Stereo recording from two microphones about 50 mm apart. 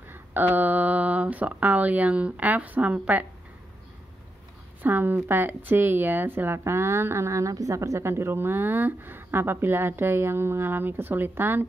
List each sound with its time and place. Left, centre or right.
0.1 s speech: right
4.8 s speech: right
6.6 s a woman's voice: right
8.1 s speech: right